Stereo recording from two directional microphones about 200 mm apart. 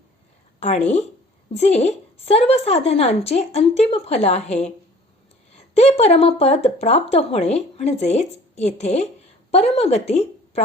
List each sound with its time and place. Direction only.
0.6 s speech: 35° left (ahead or behind)
5.5 s speech: 35° left (ahead or behind)